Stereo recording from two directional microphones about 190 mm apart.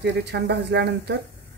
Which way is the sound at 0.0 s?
65° right (ahead or behind).